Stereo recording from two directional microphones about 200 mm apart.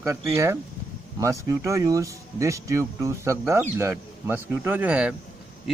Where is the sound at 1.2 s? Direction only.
15° right (ahead or behind).